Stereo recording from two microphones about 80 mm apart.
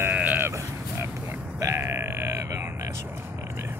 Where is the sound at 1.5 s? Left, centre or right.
Right.